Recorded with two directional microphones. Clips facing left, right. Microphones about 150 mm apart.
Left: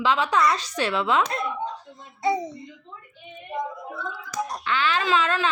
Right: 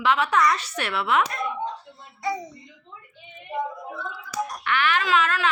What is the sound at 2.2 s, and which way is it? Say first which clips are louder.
Speech: left 5 dB; 25° left (ahead or behind).